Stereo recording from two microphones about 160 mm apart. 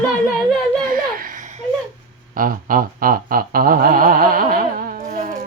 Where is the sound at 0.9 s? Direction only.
60° right (ahead or behind).